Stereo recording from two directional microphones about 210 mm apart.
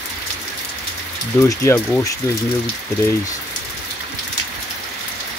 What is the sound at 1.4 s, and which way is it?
Speech, 10° left (ahead or behind).